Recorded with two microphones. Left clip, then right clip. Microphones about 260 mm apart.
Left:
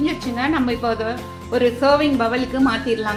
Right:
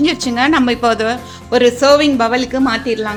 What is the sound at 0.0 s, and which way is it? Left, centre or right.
A woman's voice, right.